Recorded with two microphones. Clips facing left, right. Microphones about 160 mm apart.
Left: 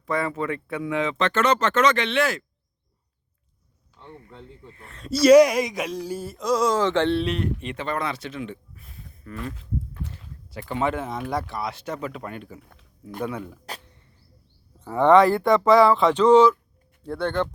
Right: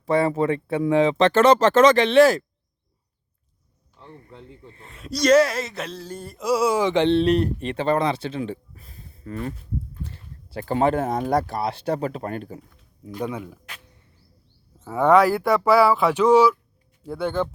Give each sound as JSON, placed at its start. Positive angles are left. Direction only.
{"t": 0.0, "sound": "speech", "side_deg": -30}
{"t": 4.7, "sound": "speech", "side_deg": -25}
{"t": 4.9, "sound": "speech", "side_deg": 0}
{"t": 6.4, "sound": "speech", "side_deg": -10}
{"t": 7.2, "sound": "speech", "side_deg": -35}
{"t": 10.6, "sound": "speech", "side_deg": -40}
{"t": 12.7, "sound": "a sound", "side_deg": 60}
{"t": 13.2, "sound": "speech", "side_deg": -15}
{"t": 14.8, "sound": "speech", "side_deg": -5}